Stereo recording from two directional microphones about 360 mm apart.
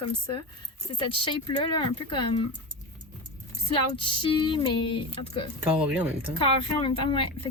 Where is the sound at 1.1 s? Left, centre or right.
Centre.